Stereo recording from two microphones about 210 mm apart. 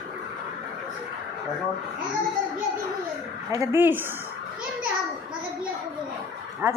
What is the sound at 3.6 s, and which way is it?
Speech, 10° right (ahead or behind).